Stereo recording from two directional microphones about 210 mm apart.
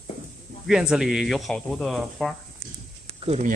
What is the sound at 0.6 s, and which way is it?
Speech, 5° right (ahead or behind).